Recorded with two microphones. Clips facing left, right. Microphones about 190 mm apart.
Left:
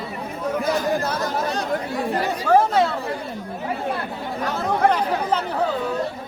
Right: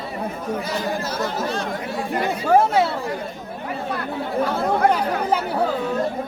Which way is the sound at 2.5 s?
10° right (ahead or behind).